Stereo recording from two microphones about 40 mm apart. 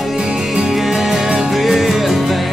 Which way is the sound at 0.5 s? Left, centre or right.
Centre.